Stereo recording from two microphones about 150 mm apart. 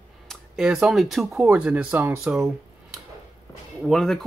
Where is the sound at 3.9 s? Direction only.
Centre (ahead or behind).